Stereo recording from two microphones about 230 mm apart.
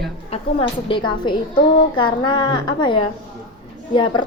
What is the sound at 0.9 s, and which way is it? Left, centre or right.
A woman's voice, left.